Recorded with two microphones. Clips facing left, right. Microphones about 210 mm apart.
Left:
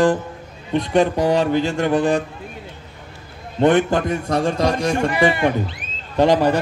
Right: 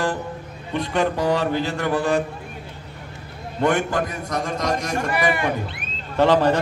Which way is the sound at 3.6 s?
25° left (ahead or behind).